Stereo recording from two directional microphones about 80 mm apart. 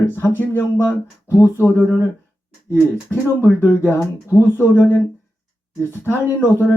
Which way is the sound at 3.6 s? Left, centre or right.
Left.